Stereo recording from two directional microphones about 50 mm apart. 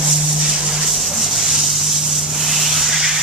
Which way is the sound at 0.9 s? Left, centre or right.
Centre.